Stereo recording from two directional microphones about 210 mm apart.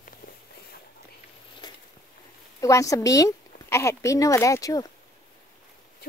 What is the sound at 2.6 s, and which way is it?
Speech, 15° left (ahead or behind).